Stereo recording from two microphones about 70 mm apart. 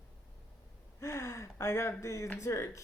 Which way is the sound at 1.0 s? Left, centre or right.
Left.